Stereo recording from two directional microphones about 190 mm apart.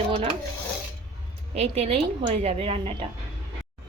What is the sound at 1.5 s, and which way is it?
A woman's voice, 35° right (ahead or behind).